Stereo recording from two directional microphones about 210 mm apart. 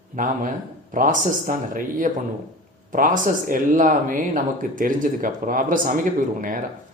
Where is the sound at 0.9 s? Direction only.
40° right (ahead or behind).